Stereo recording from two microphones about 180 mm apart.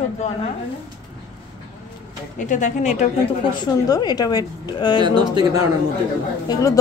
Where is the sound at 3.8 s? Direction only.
20° left (ahead or behind).